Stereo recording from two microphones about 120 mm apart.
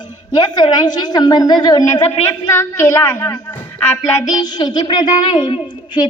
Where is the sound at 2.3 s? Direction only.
25° left (ahead or behind).